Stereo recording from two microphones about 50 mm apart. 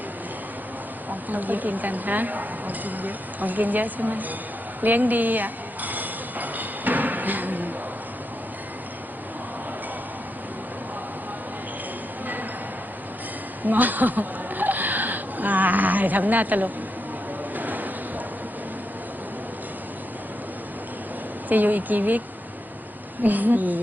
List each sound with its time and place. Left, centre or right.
1.3 s speech: right
4.8 s music: right
12.2 s music: right
13.7 s a sound: right
21.5 s speech: right
23.2 s speech: right